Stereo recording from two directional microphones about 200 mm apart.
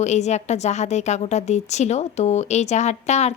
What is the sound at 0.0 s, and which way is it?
Speech, 35° left (ahead or behind).